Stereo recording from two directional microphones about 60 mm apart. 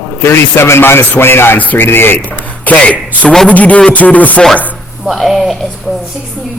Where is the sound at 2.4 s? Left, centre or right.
Left.